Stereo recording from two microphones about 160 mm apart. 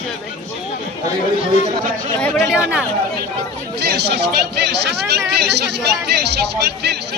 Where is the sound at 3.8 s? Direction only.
90° right.